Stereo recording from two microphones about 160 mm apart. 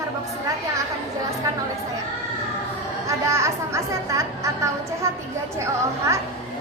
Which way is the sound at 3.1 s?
20° right (ahead or behind).